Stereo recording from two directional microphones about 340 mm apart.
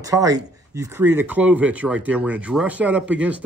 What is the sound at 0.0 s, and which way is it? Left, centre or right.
Speech, centre.